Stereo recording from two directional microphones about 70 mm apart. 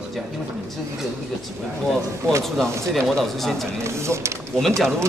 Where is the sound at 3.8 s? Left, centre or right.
Right.